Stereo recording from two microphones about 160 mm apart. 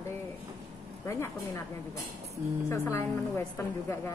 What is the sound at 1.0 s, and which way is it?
Speech, 20° left (ahead or behind).